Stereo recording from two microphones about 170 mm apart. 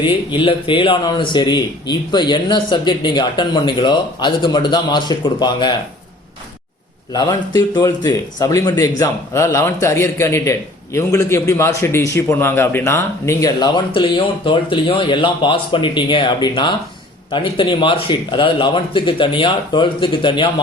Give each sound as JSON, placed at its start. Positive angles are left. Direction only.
{"t": 0.0, "sound": "a man's voice", "side_deg": 30}
{"t": 7.1, "sound": "a man's voice", "side_deg": 25}